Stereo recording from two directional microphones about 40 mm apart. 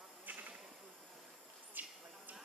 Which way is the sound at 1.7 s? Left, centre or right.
Right.